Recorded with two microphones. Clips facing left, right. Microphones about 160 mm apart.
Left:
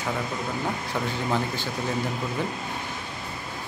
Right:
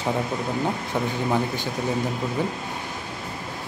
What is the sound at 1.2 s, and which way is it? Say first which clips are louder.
Speech: right 2 dB; 15° right (ahead or behind).